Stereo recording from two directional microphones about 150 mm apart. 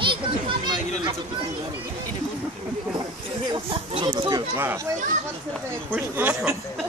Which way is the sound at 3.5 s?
35° right (ahead or behind).